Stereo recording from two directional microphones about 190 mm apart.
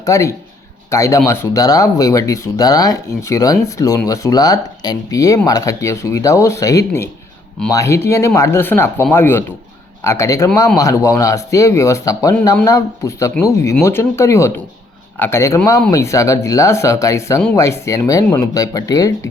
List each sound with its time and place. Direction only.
0.0 s speech: 15° left (ahead or behind)